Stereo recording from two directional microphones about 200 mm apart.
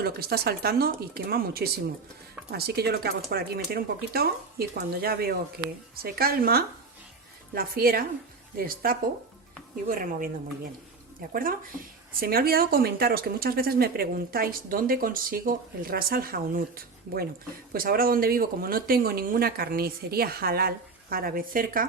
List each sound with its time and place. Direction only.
0.0 s speech: 50° right (ahead or behind)